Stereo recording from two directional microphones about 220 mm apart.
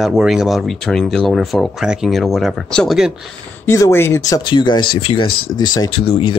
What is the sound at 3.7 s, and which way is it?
Speech, 10° left (ahead or behind).